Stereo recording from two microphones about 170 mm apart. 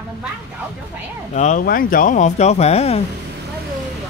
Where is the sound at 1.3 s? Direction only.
45° left (ahead or behind).